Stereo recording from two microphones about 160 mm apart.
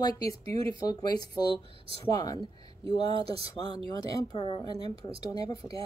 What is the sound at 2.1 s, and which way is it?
Speech, 25° left (ahead or behind).